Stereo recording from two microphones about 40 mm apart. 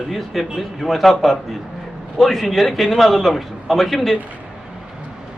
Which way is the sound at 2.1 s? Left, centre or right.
Centre.